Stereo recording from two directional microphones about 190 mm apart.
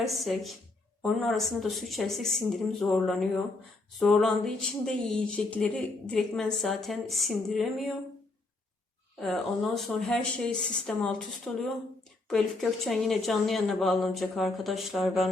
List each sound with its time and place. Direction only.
0.0 s speech: centre (ahead or behind)
9.2 s speech: centre (ahead or behind)